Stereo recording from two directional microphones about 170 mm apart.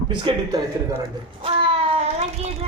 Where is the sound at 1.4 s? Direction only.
30° right (ahead or behind).